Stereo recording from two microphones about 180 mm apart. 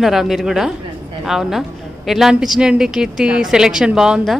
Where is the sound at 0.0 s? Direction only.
Centre (ahead or behind).